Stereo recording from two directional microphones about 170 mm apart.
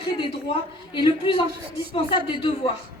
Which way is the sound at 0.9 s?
30° left (ahead or behind).